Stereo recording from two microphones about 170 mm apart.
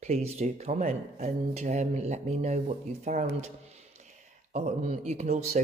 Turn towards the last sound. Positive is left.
turn(degrees=-40)  # may be behind; listen again after turning